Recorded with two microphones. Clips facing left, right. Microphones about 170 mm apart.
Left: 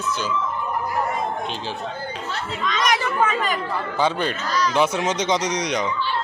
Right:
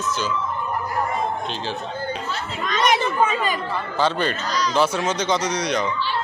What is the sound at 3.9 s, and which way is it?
Speech, 10° left (ahead or behind).